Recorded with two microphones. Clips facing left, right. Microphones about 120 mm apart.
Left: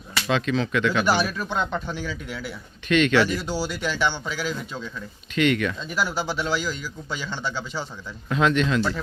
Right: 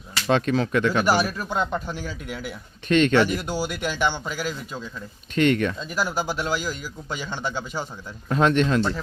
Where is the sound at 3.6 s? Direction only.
50° right (ahead or behind).